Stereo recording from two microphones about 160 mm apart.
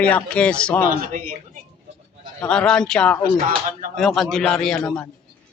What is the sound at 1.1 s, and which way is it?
Speech, 55° right (ahead or behind).